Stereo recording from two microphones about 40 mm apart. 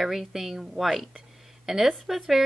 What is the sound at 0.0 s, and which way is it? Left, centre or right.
Speech, centre.